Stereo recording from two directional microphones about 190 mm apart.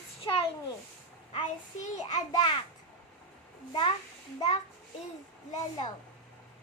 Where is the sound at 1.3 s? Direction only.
35° left (ahead or behind).